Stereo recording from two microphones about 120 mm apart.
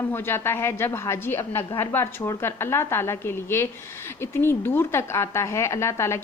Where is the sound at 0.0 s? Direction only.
20° left (ahead or behind).